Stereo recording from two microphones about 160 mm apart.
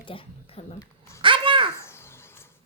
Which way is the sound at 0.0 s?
35° left (ahead or behind).